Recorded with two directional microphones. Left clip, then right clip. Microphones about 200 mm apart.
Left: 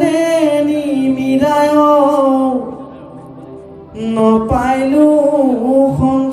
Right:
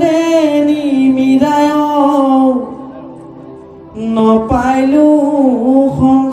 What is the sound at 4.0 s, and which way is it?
Music, 10° left (ahead or behind).